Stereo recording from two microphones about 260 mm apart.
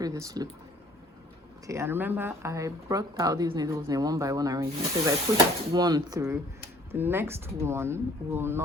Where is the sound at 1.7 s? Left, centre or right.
Centre.